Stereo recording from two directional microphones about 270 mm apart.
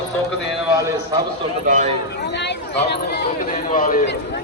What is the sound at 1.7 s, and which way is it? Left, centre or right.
Speech, right.